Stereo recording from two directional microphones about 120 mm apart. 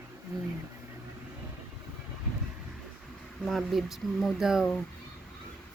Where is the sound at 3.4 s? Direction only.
Centre (ahead or behind).